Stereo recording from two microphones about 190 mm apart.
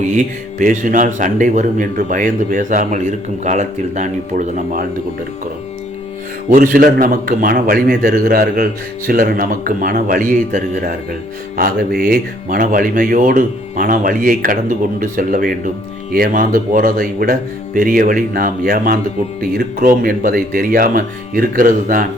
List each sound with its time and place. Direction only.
0.1 s speech: 40° right (ahead or behind)
6.5 s speech: 45° right (ahead or behind)